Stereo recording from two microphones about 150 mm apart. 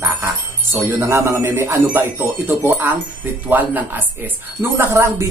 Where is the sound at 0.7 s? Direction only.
15° right (ahead or behind).